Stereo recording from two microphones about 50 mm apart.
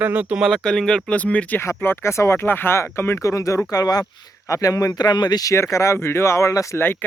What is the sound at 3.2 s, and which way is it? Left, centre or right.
Speech, left.